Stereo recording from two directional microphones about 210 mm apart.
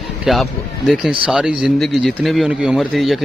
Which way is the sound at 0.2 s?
Centre (ahead or behind).